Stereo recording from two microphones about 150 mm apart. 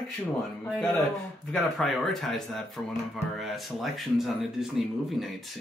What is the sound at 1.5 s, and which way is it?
Speech, centre (ahead or behind).